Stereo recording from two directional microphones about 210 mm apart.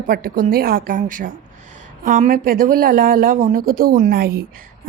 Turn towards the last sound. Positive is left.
turn(degrees=-45)  # may be behind; listen again after turning